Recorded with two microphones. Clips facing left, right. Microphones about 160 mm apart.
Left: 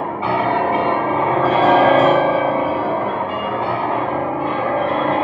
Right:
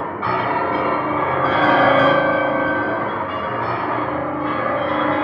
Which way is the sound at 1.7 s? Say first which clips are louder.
Left 2 dB; 30° left (ahead or behind).